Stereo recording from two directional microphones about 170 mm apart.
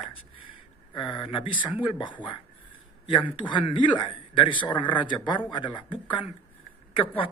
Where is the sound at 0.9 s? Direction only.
25° left (ahead or behind).